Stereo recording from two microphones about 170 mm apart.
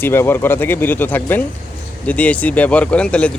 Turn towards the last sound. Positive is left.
turn(degrees=5)  # may be behind; listen again after turning